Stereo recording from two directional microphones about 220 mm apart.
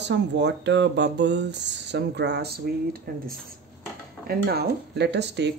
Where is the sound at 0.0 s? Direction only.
50° right (ahead or behind).